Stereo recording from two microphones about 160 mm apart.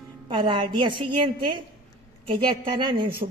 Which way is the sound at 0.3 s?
30° right (ahead or behind).